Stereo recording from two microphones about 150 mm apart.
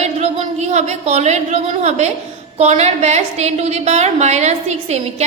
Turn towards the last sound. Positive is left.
turn(degrees=-45)  # may be behind; listen again after turning